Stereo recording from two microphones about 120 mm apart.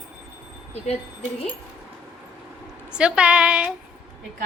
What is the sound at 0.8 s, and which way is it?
Speech, 60° left (ahead or behind).